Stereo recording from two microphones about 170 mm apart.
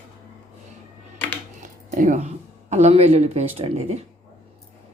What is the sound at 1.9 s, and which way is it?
Speech, 45° right (ahead or behind).